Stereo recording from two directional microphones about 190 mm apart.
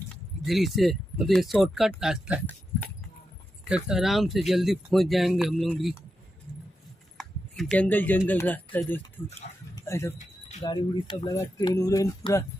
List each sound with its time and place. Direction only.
0.1 s speech: centre (ahead or behind)
3.6 s speech: 5° right (ahead or behind)
7.2 s a sound: centre (ahead or behind)
8.3 s speech: 10° left (ahead or behind)